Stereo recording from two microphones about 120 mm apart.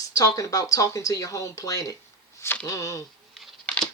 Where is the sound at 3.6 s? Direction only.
10° left (ahead or behind).